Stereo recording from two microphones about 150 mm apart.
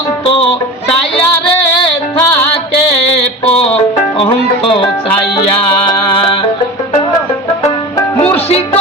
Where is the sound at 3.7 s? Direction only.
40° left (ahead or behind).